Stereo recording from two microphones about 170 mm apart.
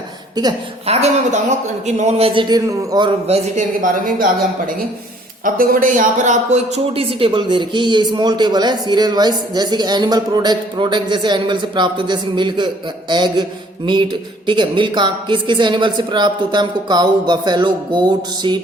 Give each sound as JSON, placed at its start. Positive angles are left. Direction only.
{"t": 0.4, "sound": "speech", "side_deg": -25}
{"t": 0.9, "sound": "speech", "side_deg": -40}